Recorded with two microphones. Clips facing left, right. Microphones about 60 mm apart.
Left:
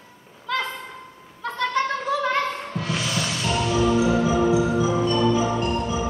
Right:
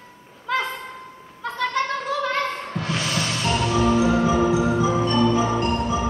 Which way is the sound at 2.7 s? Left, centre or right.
Right.